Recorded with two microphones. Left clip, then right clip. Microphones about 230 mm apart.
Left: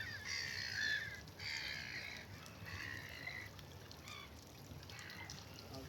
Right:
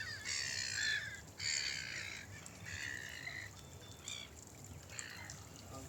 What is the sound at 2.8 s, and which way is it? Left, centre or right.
Frog, centre.